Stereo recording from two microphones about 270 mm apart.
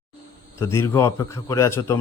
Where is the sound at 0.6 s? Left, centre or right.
Centre.